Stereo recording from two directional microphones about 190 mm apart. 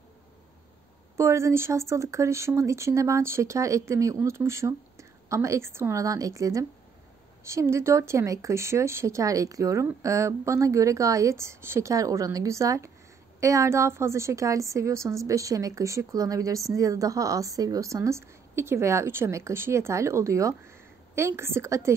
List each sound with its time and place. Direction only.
1.1 s a woman's voice: 15° right (ahead or behind)